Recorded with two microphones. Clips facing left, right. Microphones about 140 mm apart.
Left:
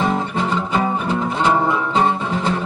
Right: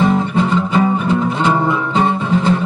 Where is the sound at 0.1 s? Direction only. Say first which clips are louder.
Right 5 dB; 35° left (ahead or behind).